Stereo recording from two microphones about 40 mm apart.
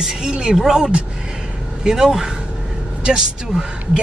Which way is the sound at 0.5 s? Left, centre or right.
Centre.